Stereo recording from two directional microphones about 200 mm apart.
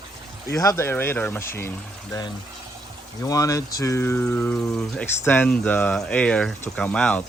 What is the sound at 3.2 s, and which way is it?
Speech, 15° left (ahead or behind).